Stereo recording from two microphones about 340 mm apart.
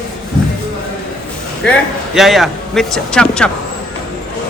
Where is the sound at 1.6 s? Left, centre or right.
Centre.